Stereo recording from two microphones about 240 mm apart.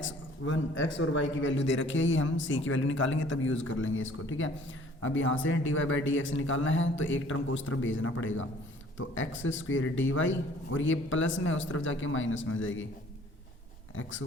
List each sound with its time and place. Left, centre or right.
0.0 s a man's voice: left
13.9 s a man's voice: left